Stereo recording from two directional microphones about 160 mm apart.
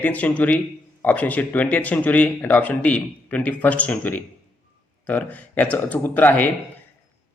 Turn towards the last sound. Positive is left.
turn(degrees=10)  # may be behind; listen again after turning